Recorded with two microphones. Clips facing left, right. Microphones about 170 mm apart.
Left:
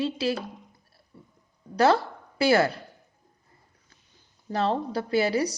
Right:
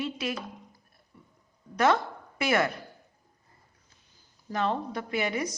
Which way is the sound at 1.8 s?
35° left (ahead or behind).